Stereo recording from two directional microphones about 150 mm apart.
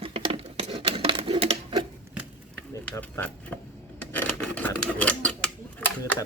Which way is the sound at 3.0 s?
15° left (ahead or behind).